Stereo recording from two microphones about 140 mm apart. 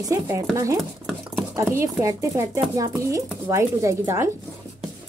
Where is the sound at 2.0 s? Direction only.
20° right (ahead or behind).